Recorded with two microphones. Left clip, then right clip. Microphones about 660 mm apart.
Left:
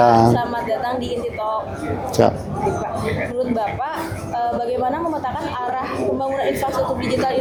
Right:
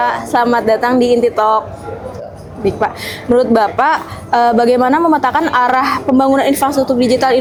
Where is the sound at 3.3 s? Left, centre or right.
Right.